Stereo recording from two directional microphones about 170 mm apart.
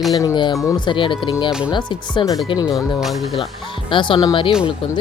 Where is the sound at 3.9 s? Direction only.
30° left (ahead or behind).